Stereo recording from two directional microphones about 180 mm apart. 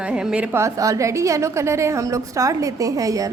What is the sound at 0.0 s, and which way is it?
A woman's voice, 5° right (ahead or behind).